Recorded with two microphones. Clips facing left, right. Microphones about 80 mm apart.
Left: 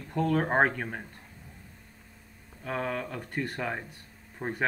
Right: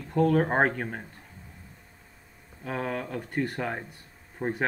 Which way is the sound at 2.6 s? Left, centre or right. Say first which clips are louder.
Right 1 dB; centre.